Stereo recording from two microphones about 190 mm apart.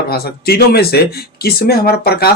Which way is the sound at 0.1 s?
55° left (ahead or behind).